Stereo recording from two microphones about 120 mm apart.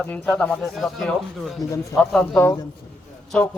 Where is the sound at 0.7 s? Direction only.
Centre (ahead or behind).